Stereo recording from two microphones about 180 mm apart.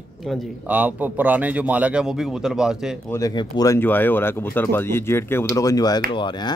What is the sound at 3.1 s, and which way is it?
A man's voice, 20° left (ahead or behind).